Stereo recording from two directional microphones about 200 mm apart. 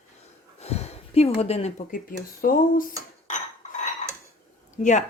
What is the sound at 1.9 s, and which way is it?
Speech, 45° left (ahead or behind).